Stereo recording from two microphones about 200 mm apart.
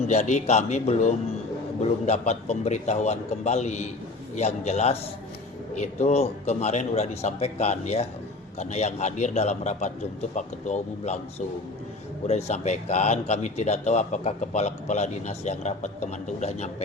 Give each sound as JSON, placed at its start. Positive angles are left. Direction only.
{"t": 0.1, "sound": "a man's voice", "side_deg": 35}